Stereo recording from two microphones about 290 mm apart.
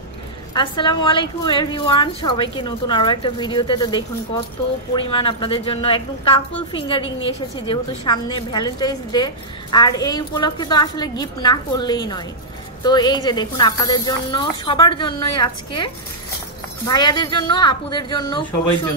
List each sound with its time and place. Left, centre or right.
0.6 s a woman's voice: centre